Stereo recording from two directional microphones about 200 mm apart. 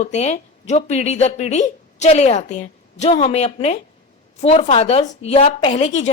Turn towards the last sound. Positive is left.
turn(degrees=35)  # may be behind; listen again after turning